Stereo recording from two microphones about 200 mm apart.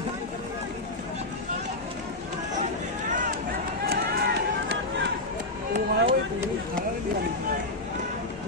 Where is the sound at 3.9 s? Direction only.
50° right (ahead or behind).